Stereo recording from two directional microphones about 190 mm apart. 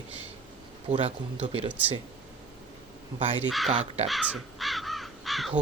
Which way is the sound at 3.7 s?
35° right (ahead or behind).